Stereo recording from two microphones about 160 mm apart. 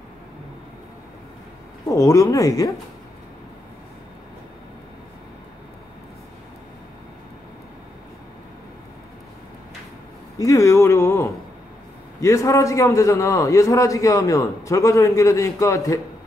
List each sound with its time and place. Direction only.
1.9 s a man's voice: 20° left (ahead or behind)
10.4 s a sound: 20° left (ahead or behind)
12.2 s a man's voice: 20° left (ahead or behind)